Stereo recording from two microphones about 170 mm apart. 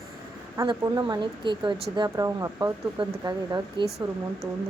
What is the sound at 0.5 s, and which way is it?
Speech, 20° right (ahead or behind).